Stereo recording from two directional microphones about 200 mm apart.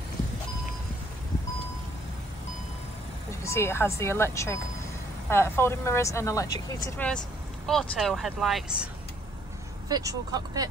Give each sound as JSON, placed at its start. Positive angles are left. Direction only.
{"t": 3.4, "sound": "speech", "side_deg": 15}
{"t": 7.6, "sound": "speech", "side_deg": 0}
{"t": 9.8, "sound": "speech", "side_deg": -20}